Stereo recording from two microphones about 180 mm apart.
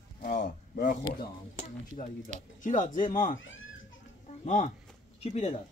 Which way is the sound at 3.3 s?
90° left.